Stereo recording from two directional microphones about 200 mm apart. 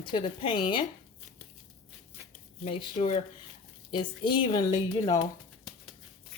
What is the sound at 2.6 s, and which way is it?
A woman's voice, 25° left (ahead or behind).